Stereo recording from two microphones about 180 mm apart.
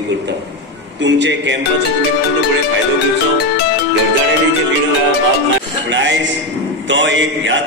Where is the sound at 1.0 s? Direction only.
80° right.